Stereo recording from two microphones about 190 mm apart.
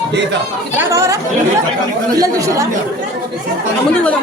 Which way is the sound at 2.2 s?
20° right (ahead or behind).